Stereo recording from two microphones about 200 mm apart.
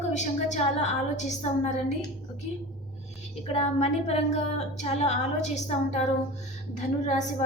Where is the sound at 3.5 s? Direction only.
35° left (ahead or behind).